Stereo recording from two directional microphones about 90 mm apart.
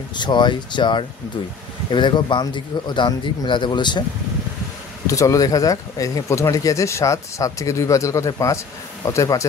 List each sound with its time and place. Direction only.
0.1 s a man's voice: 55° left (ahead or behind)
5.0 s speech: 35° left (ahead or behind)